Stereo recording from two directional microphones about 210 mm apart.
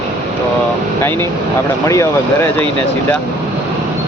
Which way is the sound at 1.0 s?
10° left (ahead or behind).